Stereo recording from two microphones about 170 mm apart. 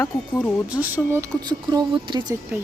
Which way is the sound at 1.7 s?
25° right (ahead or behind).